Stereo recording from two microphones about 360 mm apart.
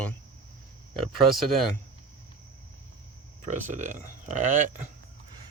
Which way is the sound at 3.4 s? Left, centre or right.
Centre.